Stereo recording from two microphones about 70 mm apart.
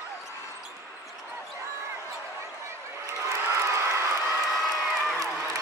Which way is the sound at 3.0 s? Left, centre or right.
Right.